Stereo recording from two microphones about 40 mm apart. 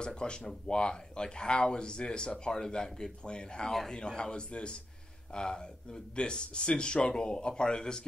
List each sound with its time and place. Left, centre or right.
0.0 s speech: left